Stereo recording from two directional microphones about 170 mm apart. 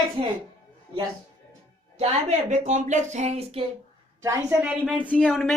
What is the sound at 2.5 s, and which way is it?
Speech, 45° right (ahead or behind).